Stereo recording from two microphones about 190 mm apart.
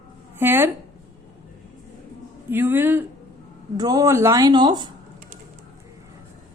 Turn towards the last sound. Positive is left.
turn(degrees=-25)  # may be behind; listen again after turning